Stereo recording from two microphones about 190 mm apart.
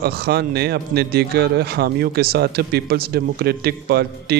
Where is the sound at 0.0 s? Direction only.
55° right (ahead or behind).